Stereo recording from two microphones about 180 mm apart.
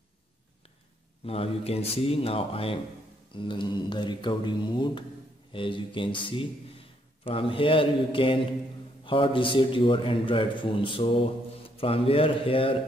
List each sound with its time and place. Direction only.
1.2 s a man's voice: 35° left (ahead or behind)